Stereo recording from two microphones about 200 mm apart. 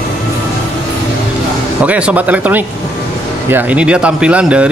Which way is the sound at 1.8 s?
5° right (ahead or behind).